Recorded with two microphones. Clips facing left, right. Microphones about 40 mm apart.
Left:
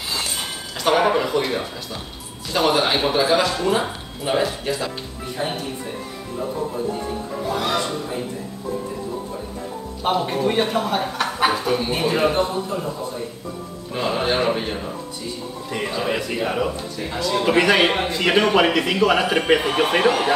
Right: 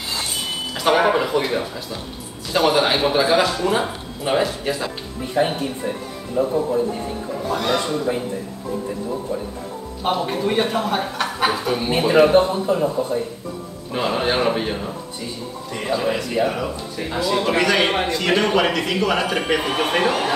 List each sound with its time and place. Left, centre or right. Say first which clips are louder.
0.7 s speech: right 1 dB; centre
5.4 s speech: right 6 dB; right
7.4 s speech: right 2 dB; centre
10.0 s speech: left 1 dB; centre
12.4 s speech: right 6 dB; right
13.9 s speech: right 1 dB; centre
16.0 s a man's voice: right 3 dB; centre
16.9 s speech: right 2 dB; centre
17.6 s a man's voice: left 3 dB; centre